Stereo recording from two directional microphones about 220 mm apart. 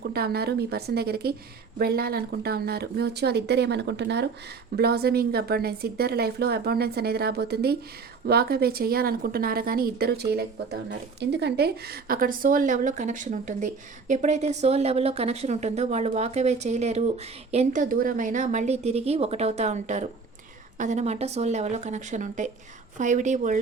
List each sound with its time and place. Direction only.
0.1 s a woman's voice: 45° right (ahead or behind)